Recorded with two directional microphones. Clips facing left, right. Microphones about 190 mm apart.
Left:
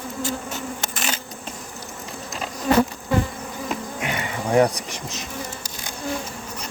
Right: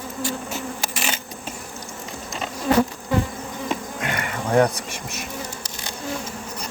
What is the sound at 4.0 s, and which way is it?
Insect, 15° left (ahead or behind).